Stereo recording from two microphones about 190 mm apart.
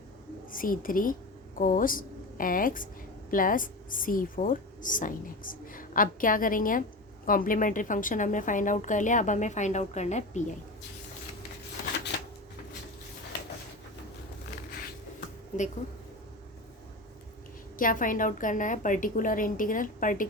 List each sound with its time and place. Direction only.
0.5 s a woman's voice: 45° left (ahead or behind)
17.7 s a woman's voice: 45° left (ahead or behind)